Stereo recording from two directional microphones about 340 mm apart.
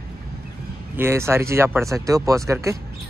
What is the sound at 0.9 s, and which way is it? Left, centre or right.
Speech, centre.